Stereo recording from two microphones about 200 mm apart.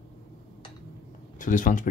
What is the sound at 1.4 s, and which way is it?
Speech, 40° left (ahead or behind).